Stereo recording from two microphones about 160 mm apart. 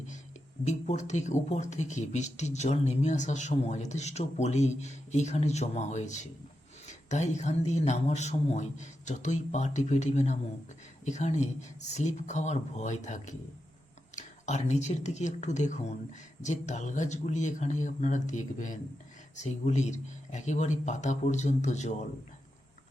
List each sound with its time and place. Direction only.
0.6 s speech: 45° left (ahead or behind)